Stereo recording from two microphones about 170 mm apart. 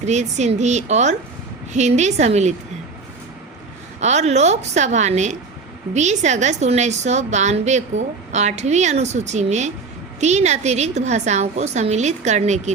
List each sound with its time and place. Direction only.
0.0 s a woman's voice: 40° right (ahead or behind)
4.0 s a woman's voice: 40° right (ahead or behind)